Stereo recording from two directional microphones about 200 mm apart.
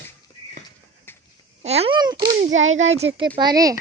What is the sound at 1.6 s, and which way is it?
Speech, 30° right (ahead or behind).